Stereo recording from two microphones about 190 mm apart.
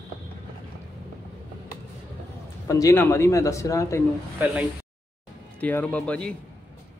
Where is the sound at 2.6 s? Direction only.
15° left (ahead or behind).